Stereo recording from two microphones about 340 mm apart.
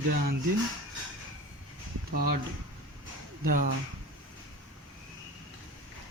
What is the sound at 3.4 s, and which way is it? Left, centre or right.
Speech, right.